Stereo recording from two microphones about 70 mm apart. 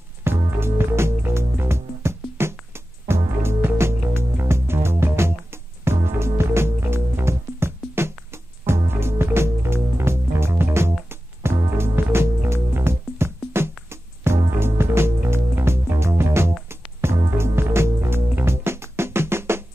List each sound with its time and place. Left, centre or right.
0.2 s music: right